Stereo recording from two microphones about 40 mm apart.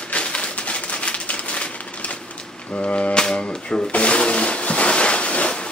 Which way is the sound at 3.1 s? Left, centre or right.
Left.